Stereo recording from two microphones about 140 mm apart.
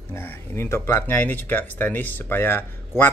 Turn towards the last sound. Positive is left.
turn(degrees=15)  # may be behind; listen again after turning